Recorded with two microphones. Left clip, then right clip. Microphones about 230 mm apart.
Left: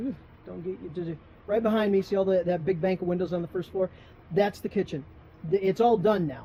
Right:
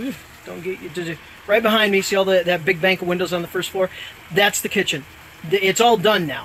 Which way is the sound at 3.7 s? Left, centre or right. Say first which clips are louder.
Right 7 dB; right.